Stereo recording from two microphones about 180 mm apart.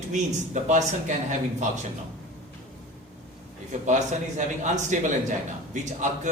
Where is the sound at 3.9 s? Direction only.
40° right (ahead or behind).